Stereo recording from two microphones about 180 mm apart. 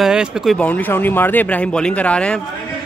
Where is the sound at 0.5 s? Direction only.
10° left (ahead or behind).